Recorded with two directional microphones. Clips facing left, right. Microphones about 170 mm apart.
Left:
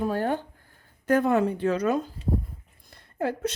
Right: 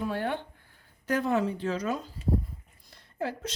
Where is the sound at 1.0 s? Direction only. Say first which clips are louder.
Left 5 dB; 55° left (ahead or behind).